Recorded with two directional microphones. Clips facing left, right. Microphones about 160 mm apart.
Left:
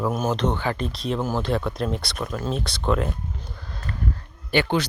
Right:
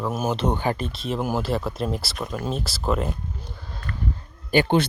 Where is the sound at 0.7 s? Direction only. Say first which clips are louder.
Left 1 dB; centre (ahead or behind).